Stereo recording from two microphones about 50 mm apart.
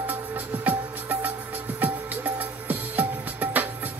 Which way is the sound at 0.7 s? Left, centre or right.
Right.